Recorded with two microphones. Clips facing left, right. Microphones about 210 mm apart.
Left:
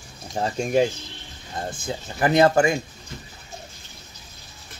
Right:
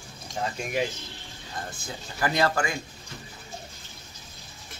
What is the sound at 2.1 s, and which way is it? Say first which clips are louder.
Speech: left 8 dB; 25° left (ahead or behind).